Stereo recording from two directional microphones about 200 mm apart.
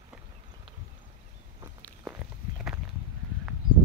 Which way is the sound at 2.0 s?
5° right (ahead or behind).